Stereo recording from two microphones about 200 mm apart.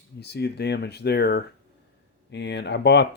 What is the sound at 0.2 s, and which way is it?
Speech, 55° left (ahead or behind).